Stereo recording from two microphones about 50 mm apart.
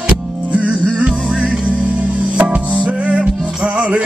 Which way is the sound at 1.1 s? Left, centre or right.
Centre.